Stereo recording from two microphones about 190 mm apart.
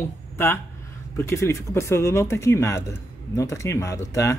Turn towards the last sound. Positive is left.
turn(degrees=15)  # may be behind; listen again after turning